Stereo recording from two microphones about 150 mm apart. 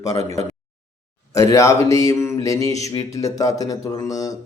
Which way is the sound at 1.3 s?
20° left (ahead or behind).